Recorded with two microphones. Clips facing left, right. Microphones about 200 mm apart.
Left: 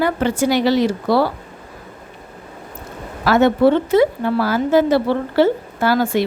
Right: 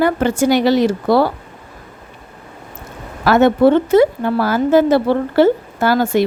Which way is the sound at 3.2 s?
50° right (ahead or behind).